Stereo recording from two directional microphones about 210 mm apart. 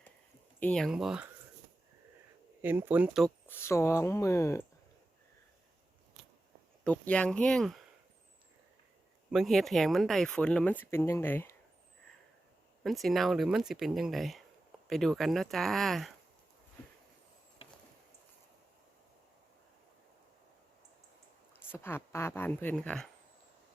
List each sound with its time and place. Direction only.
0.6 s speech: centre (ahead or behind)
2.6 s speech: 10° right (ahead or behind)
3.4 s a woman's voice: 10° left (ahead or behind)
6.8 s speech: 5° left (ahead or behind)
9.3 s speech: centre (ahead or behind)
12.8 s speech: centre (ahead or behind)
21.7 s a woman's voice: 10° left (ahead or behind)